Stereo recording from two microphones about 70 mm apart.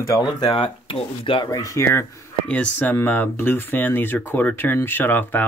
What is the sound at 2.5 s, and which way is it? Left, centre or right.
Speech, left.